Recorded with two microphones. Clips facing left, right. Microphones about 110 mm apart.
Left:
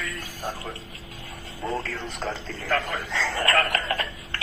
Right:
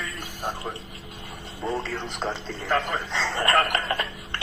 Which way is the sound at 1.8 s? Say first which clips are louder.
Right 1 dB; 20° right (ahead or behind).